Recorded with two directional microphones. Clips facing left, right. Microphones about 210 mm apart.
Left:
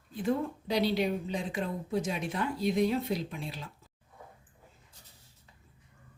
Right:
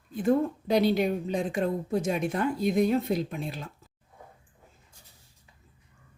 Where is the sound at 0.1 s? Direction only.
50° right (ahead or behind).